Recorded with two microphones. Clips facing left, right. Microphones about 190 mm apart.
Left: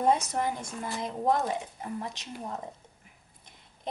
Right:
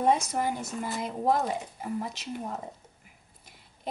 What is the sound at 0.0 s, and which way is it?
Speech, 5° right (ahead or behind).